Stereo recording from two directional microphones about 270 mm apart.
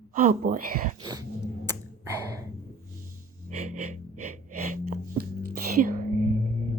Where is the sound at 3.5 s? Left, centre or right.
Right.